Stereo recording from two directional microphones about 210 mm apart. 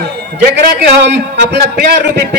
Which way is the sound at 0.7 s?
55° right (ahead or behind).